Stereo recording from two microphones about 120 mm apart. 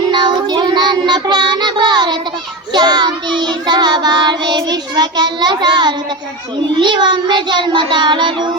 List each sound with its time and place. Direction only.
0.1 s child singing: 40° right (ahead or behind)